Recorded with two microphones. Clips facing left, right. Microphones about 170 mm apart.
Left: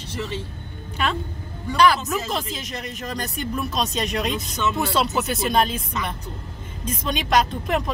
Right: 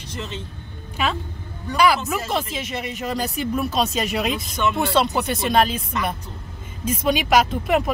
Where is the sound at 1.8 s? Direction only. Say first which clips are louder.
Even; 5° right (ahead or behind).